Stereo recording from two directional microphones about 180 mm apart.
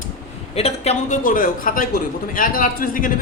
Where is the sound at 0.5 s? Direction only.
35° left (ahead or behind).